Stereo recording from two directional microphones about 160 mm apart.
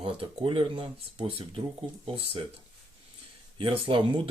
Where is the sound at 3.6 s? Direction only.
35° right (ahead or behind).